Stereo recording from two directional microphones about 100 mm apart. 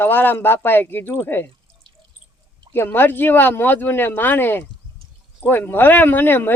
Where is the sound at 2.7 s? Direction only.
20° left (ahead or behind).